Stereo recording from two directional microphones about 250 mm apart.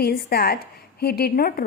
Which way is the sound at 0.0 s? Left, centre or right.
Left.